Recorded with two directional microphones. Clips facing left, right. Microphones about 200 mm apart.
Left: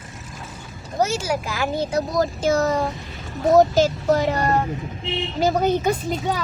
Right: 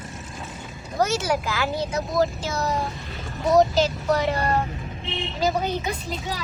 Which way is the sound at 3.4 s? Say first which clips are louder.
Left 3 dB; 50° left (ahead or behind).